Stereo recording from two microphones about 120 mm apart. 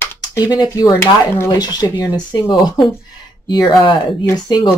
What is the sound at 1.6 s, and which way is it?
Speech, 35° left (ahead or behind).